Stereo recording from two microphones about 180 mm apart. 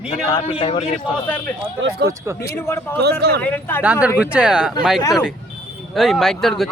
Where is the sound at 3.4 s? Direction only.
10° left (ahead or behind).